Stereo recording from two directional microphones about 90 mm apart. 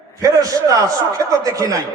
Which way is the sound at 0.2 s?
40° right (ahead or behind).